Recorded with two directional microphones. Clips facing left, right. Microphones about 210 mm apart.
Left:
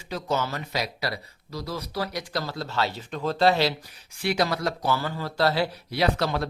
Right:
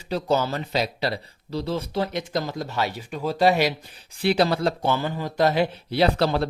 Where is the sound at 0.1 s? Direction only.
30° right (ahead or behind); by 3.8 s 15° right (ahead or behind).